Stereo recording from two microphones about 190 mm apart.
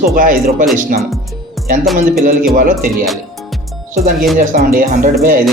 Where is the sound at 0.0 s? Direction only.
45° right (ahead or behind).